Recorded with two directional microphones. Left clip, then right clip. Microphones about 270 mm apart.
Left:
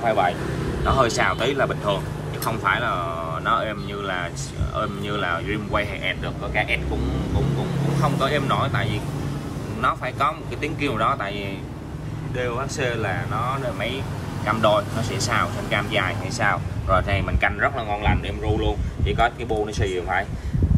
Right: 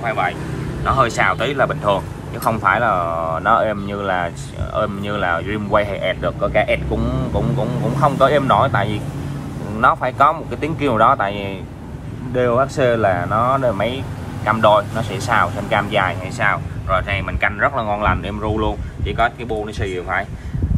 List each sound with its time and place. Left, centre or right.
0.0 s speech: centre
8.0 s speech: centre
19.1 s speech: centre